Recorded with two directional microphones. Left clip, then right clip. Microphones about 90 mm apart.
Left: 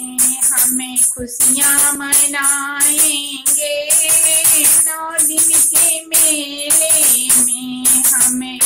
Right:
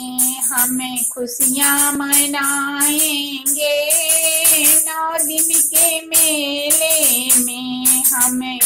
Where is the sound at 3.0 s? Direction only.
20° right (ahead or behind).